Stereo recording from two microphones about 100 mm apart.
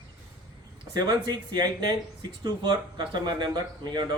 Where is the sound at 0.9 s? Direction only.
40° right (ahead or behind).